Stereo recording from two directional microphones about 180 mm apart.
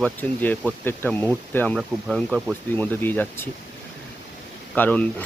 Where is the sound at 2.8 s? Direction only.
10° left (ahead or behind).